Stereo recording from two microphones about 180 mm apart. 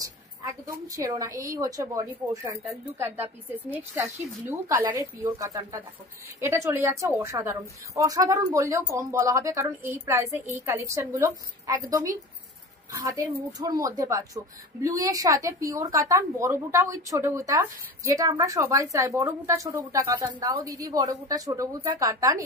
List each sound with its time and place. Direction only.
0.0 s a woman's voice: 20° right (ahead or behind)
3.7 s a woman's voice: 15° right (ahead or behind)